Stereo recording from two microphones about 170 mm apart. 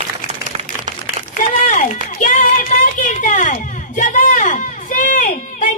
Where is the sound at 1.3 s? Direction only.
45° left (ahead or behind).